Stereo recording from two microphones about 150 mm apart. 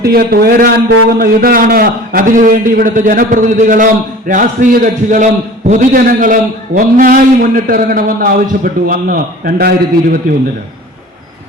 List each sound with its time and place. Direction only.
0.0 s a man's voice: 90° right